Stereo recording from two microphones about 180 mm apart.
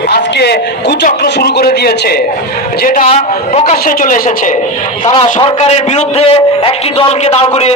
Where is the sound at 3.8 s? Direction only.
50° left (ahead or behind).